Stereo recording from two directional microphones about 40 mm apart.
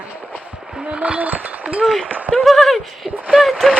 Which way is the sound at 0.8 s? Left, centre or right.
Right.